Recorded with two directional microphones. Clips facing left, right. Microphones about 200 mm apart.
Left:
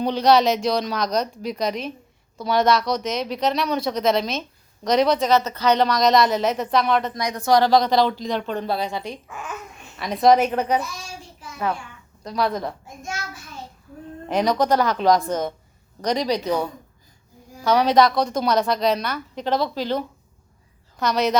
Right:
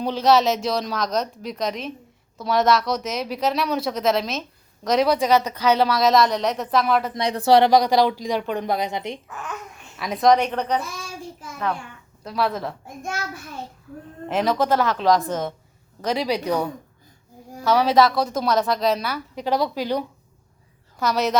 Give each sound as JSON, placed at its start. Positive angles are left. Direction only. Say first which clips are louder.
{"t": 0.0, "sound": "speech", "louder": "left 1 dB", "side_deg": 0}
{"t": 7.1, "sound": "speech", "louder": "right 2 dB", "side_deg": -30}
{"t": 7.7, "sound": "a woman's voice", "louder": "right 1 dB", "side_deg": -10}
{"t": 9.2, "sound": "speech", "louder": "even", "side_deg": 10}
{"t": 12.2, "sound": "speech", "louder": "left 1 dB", "side_deg": 0}
{"t": 13.0, "sound": "a child's voice", "louder": "right 5 dB", "side_deg": -60}
{"t": 14.3, "sound": "a woman's voice", "louder": "left 1 dB", "side_deg": 0}